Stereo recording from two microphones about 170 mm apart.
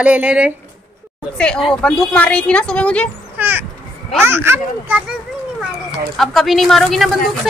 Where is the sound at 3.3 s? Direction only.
10° right (ahead or behind).